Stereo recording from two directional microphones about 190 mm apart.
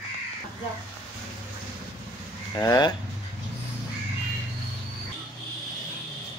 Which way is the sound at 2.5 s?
20° left (ahead or behind).